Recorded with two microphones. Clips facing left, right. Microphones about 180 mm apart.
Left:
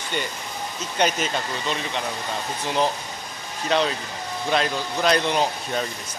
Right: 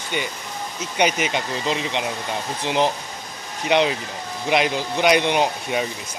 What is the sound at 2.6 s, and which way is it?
Speech, 25° right (ahead or behind).